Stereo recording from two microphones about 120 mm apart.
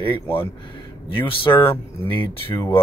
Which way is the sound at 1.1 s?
45° left (ahead or behind).